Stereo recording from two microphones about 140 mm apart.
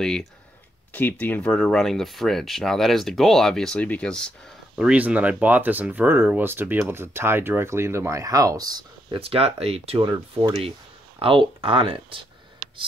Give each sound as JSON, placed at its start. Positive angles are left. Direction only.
{"t": 0.0, "sound": "speech", "side_deg": 5}
{"t": 4.7, "sound": "speech", "side_deg": -10}
{"t": 9.2, "sound": "speech", "side_deg": -45}